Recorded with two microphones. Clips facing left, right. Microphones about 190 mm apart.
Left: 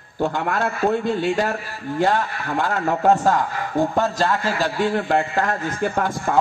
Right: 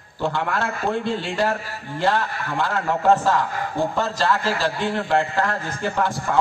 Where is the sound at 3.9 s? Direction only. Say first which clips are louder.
Left 2 dB; 45° left (ahead or behind).